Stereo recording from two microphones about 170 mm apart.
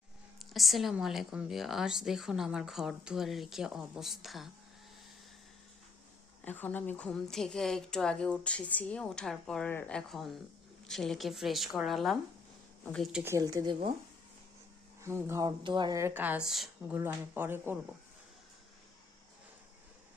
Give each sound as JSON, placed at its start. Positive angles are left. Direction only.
{"t": 0.3, "sound": "a woman's voice", "side_deg": 0}
{"t": 6.4, "sound": "a woman's voice", "side_deg": 10}
{"t": 13.2, "sound": "speech", "side_deg": -20}
{"t": 15.0, "sound": "speech", "side_deg": -15}